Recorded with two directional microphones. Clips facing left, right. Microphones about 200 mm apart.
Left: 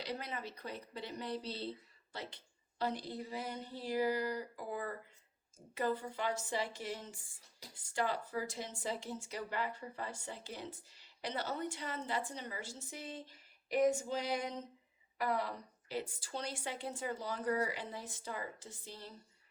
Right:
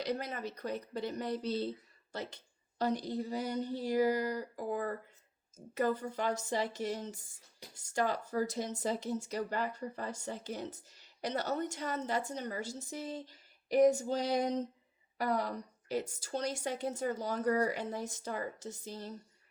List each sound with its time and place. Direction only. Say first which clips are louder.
0.0 s a woman's voice: right 6 dB; 45° right (ahead or behind)